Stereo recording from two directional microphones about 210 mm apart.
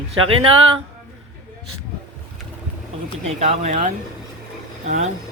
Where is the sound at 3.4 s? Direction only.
30° right (ahead or behind).